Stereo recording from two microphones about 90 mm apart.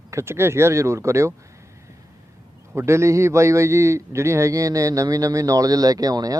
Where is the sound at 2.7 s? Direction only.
30° right (ahead or behind).